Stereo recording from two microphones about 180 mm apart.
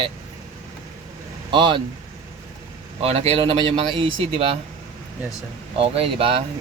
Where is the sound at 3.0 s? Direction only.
35° right (ahead or behind).